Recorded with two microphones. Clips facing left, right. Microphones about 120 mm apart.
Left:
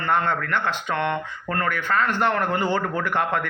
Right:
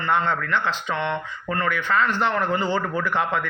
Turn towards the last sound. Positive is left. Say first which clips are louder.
# even
turn(degrees=50)  # may be behind; listen again after turning